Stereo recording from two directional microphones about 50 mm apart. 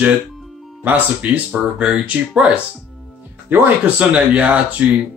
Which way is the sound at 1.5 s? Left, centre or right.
Right.